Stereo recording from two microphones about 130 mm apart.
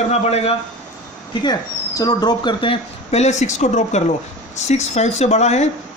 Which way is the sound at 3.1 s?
65° left (ahead or behind).